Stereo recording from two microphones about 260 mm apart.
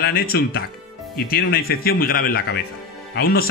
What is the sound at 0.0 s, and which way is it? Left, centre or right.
A man's voice, left.